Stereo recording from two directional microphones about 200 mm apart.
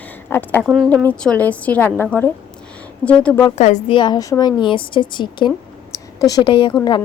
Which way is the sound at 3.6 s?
35° left (ahead or behind).